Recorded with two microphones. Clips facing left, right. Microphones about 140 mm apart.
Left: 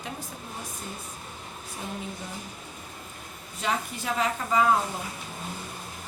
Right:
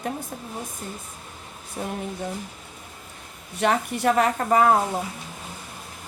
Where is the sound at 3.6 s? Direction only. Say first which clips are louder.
Right 8 dB; 65° right (ahead or behind).